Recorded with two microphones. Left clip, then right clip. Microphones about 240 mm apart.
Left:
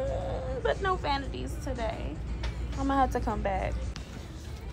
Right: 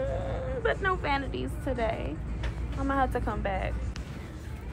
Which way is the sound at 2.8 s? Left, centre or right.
Left.